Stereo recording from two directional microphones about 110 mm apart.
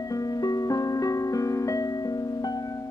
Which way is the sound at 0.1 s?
35° left (ahead or behind).